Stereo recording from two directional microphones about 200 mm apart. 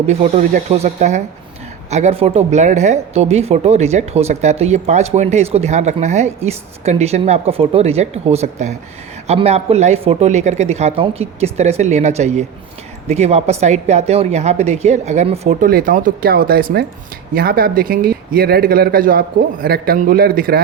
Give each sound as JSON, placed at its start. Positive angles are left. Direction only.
{"t": 0.1, "sound": "speech", "side_deg": -40}